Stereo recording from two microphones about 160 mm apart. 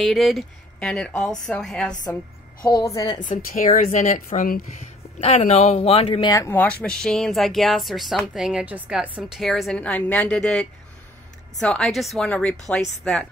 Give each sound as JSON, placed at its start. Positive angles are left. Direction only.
{"t": 0.0, "sound": "speech", "side_deg": 0}
{"t": 2.6, "sound": "a woman's voice", "side_deg": 20}
{"t": 3.5, "sound": "speech", "side_deg": 60}
{"t": 6.3, "sound": "speech", "side_deg": 15}